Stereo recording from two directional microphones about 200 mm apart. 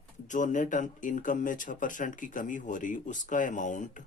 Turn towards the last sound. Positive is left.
turn(degrees=40)  # may be behind; listen again after turning